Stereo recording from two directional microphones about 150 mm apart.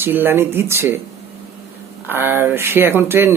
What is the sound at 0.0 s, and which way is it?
Speech, 15° right (ahead or behind).